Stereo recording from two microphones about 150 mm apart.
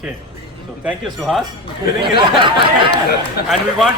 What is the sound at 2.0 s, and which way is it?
Speech, 35° right (ahead or behind).